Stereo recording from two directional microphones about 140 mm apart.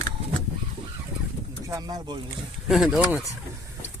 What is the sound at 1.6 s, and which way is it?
Speech, 25° right (ahead or behind).